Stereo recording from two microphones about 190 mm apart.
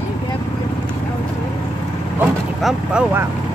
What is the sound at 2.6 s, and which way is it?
Speech, 10° right (ahead or behind).